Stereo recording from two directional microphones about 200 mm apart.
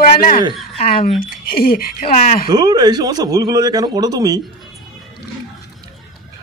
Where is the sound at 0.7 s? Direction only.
30° left (ahead or behind).